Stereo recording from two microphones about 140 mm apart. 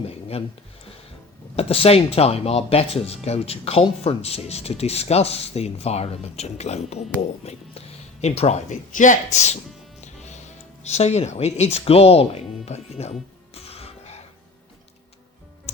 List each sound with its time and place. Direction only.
0.1 s speech: 45° left (ahead or behind)
1.5 s speech: 45° left (ahead or behind)
10.0 s music: 55° left (ahead or behind)
10.8 s speech: 50° left (ahead or behind)